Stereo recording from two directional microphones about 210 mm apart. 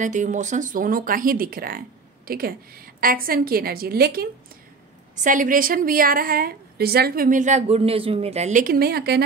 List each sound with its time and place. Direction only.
0.0 s a woman's voice: 35° right (ahead or behind)